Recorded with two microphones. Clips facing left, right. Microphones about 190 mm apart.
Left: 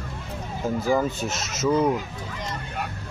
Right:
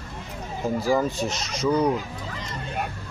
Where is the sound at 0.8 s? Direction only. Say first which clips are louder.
Even; centre (ahead or behind).